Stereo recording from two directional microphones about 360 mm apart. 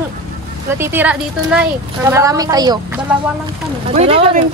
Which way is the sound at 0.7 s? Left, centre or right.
Centre.